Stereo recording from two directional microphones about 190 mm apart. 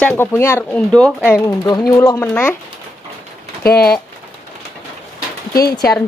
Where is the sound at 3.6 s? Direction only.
55° left (ahead or behind).